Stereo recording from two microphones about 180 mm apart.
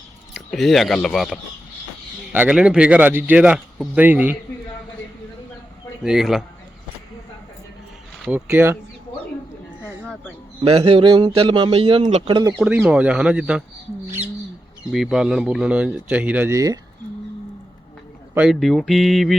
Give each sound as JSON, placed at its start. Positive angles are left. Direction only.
{"t": 0.3, "sound": "a man's voice", "side_deg": 0}
{"t": 6.0, "sound": "speech", "side_deg": -5}
{"t": 8.4, "sound": "a man's voice", "side_deg": -15}
{"t": 10.6, "sound": "a man's voice", "side_deg": -30}
{"t": 12.3, "sound": "speech", "side_deg": -20}
{"t": 12.5, "sound": "speech", "side_deg": -5}
{"t": 14.9, "sound": "a man's voice", "side_deg": 0}
{"t": 18.3, "sound": "speech", "side_deg": 0}